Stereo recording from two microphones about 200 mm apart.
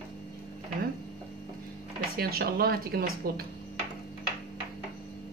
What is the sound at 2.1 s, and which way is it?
A woman's voice, 50° right (ahead or behind).